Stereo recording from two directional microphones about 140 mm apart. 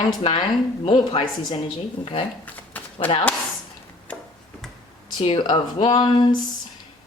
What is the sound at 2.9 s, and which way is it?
Speech, 35° left (ahead or behind).